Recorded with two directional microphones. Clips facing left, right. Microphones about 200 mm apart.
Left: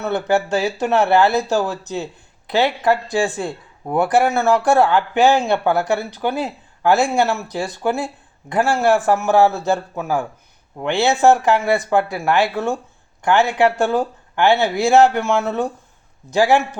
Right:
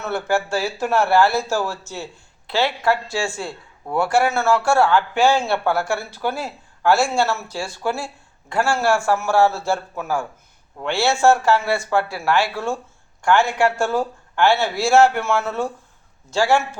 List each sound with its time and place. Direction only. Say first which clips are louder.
0.0 s speech: left 3 dB; 20° left (ahead or behind)